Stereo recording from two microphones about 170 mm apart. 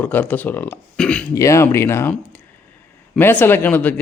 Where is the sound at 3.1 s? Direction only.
10° left (ahead or behind).